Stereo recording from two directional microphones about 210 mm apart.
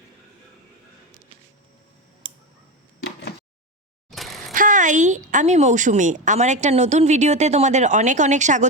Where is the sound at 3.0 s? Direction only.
50° left (ahead or behind).